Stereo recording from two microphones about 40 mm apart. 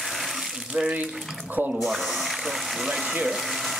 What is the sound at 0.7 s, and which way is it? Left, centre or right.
Speech, right.